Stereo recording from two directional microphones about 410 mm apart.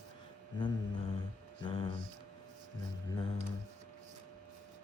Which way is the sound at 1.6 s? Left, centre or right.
Centre.